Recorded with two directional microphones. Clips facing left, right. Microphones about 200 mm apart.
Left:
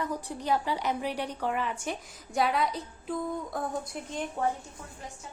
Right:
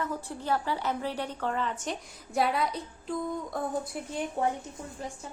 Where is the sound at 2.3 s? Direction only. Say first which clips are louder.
Even; centre (ahead or behind).